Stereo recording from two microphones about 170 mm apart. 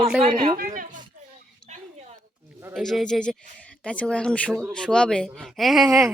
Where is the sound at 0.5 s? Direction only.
55° right (ahead or behind).